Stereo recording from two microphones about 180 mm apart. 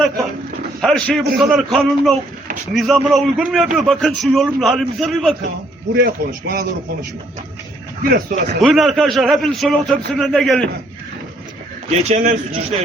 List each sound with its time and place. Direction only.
0.8 s a man's voice: 5° left (ahead or behind)
5.9 s a man's voice: 60° right (ahead or behind)
8.0 s a man's voice: 55° right (ahead or behind)
8.6 s a man's voice: centre (ahead or behind)
11.9 s speech: 40° right (ahead or behind)